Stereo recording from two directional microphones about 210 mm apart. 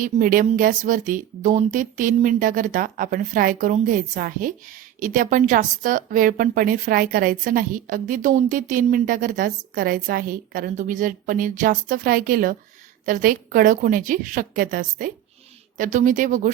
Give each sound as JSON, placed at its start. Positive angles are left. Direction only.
{"t": 0.0, "sound": "speech", "side_deg": -40}